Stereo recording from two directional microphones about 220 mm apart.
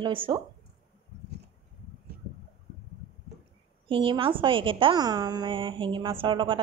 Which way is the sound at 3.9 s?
25° right (ahead or behind).